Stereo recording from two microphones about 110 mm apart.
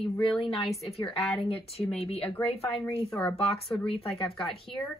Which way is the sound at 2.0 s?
60° left (ahead or behind).